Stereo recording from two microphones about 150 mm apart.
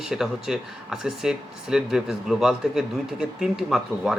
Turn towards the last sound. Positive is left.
turn(degrees=0)  # may be behind; listen again after turning